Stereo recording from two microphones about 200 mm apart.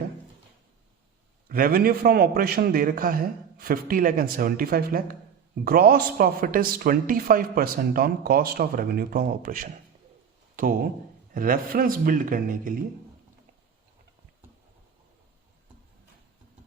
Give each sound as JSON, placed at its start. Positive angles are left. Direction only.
{"t": 1.5, "sound": "speech", "side_deg": -45}